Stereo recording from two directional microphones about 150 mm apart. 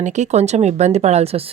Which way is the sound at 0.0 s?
50° right (ahead or behind).